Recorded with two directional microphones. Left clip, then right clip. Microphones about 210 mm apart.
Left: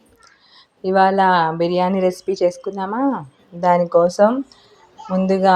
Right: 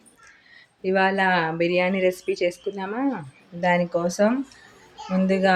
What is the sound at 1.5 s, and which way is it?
Speech, 20° left (ahead or behind).